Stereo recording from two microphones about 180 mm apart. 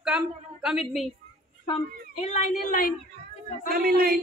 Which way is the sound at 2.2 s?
40° left (ahead or behind).